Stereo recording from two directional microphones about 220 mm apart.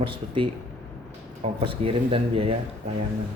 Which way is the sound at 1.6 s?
25° right (ahead or behind).